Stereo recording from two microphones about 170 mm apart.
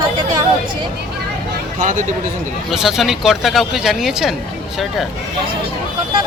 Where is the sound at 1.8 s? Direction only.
50° right (ahead or behind).